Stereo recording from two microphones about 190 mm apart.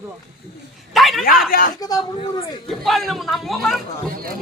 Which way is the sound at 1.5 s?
50° left (ahead or behind).